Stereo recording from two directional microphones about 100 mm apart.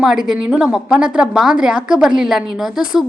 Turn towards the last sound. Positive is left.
turn(degrees=-5)  # may be behind; listen again after turning